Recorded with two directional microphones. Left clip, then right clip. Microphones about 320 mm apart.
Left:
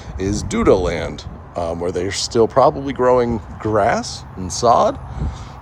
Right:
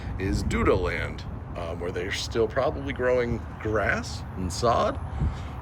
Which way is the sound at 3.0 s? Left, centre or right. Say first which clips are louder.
Left 8 dB; left.